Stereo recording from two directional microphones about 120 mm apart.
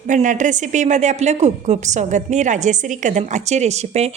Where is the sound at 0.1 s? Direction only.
90° right.